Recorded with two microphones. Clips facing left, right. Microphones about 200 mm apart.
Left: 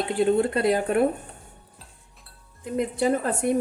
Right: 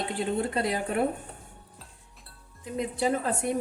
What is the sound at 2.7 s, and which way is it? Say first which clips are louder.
Speech: left 4 dB; 55° left (ahead or behind).